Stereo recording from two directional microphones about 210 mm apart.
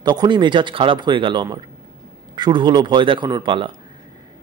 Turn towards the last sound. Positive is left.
turn(degrees=-25)  # may be behind; listen again after turning